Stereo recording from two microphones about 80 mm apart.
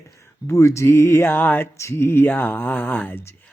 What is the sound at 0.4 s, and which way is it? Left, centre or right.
Speech, left.